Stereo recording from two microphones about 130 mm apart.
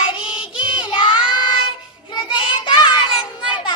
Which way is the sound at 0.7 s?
40° left (ahead or behind).